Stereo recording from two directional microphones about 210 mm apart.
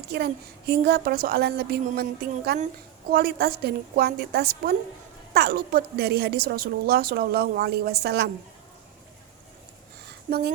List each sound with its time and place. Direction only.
0.1 s a woman's voice: 50° right (ahead or behind)
10.2 s a woman's voice: 45° right (ahead or behind)